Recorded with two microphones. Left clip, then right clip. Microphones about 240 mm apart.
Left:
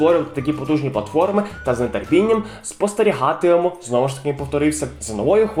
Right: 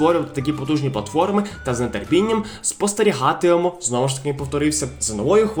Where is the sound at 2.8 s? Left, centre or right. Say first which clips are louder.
Left 1 dB; right.